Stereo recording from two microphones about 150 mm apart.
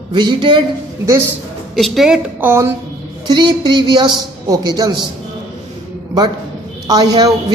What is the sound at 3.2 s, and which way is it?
A man's voice, 30° right (ahead or behind).